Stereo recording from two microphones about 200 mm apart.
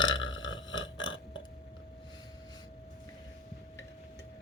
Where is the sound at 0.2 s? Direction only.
75° left (ahead or behind).